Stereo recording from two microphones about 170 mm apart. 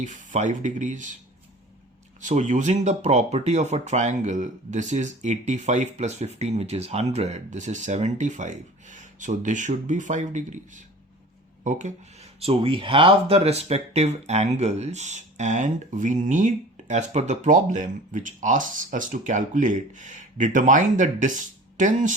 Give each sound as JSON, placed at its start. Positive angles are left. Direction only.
{"t": 0.0, "sound": "speech", "side_deg": -45}
{"t": 2.2, "sound": "speech", "side_deg": -45}
{"t": 12.4, "sound": "speech", "side_deg": -35}